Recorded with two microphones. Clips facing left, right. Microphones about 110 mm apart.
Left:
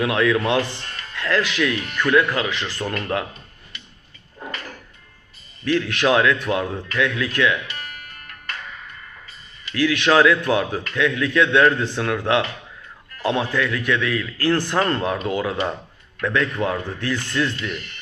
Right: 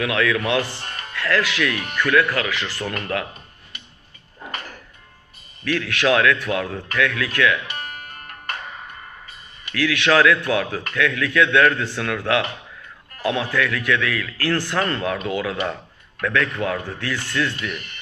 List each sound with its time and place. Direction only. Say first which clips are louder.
0.0 s speech: left 2 dB; 25° left (ahead or behind)
0.6 s speech: left 1 dB; 35° right (ahead or behind)
1.1 s speech: even; 20° left (ahead or behind)
5.6 s speech: left 1 dB; 25° left (ahead or behind)
7.8 s music: right 3 dB; 30° right (ahead or behind)
9.7 s speech: left 1 dB; 20° left (ahead or behind)